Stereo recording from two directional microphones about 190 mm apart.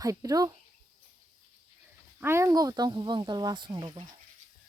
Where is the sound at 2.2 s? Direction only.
15° right (ahead or behind).